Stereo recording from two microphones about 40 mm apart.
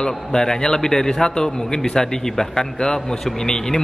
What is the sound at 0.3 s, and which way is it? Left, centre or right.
A man's voice, centre.